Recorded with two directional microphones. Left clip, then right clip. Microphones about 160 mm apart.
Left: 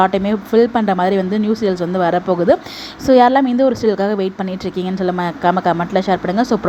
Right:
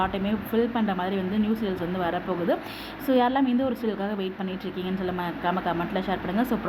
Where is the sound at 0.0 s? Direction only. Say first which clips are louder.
Left 12 dB; 50° left (ahead or behind).